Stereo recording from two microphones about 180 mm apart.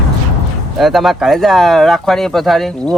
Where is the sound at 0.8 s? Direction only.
Centre (ahead or behind).